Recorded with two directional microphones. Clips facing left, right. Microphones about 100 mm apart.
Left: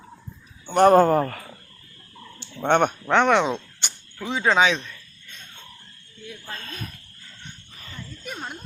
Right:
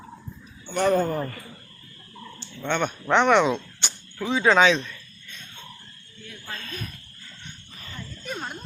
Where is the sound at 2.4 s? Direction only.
55° left (ahead or behind).